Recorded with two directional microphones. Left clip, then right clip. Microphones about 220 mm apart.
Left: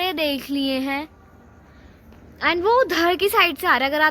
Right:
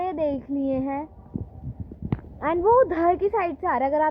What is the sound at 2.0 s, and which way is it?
A woman's voice, 5° left (ahead or behind).